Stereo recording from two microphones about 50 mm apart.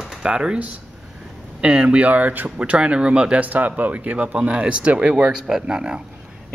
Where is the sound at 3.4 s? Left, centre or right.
Right.